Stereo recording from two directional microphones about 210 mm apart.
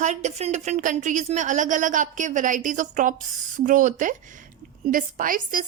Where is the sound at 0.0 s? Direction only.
35° right (ahead or behind).